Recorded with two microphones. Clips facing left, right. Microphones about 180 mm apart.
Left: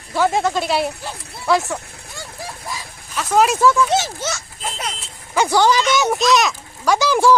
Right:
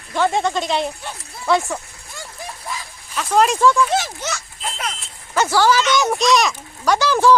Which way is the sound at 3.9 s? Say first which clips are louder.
Left 2 dB; 25° left (ahead or behind).